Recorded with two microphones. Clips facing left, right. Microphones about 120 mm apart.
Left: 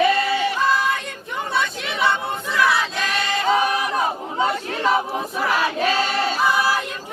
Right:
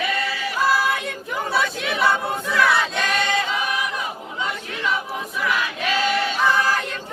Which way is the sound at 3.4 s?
40° left (ahead or behind).